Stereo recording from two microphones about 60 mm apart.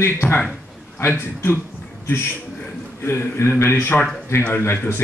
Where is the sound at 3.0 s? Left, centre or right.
Left.